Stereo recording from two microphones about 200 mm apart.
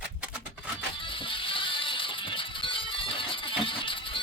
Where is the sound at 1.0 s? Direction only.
25° left (ahead or behind).